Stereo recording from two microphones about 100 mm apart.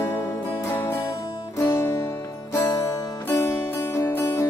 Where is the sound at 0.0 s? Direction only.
25° left (ahead or behind).